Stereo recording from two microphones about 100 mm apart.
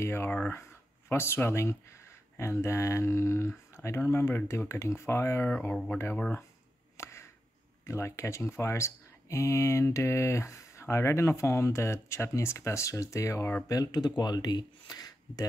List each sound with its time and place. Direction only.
0.0 s speech: 25° left (ahead or behind)
7.0 s a sound: 30° left (ahead or behind)
7.8 s speech: 30° left (ahead or behind)
13.7 s speech: 40° left (ahead or behind)